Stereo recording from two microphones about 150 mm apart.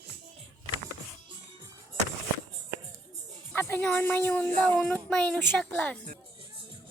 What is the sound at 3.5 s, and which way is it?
Speech, 15° left (ahead or behind).